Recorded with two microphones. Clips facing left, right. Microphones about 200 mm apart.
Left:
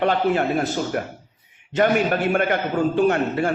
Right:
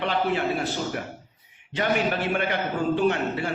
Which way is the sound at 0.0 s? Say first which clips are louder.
Left 5 dB; 45° left (ahead or behind).